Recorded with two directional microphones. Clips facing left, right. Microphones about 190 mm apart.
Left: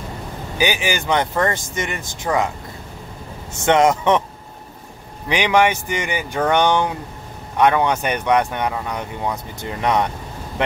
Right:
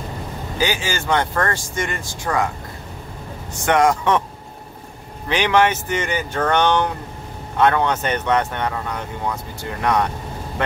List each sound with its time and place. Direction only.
0.6 s speech: 15° left (ahead or behind)
3.5 s speech: 25° left (ahead or behind)
5.3 s speech: 15° left (ahead or behind)